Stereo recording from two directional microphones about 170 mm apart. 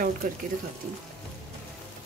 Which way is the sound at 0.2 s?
50° right (ahead or behind).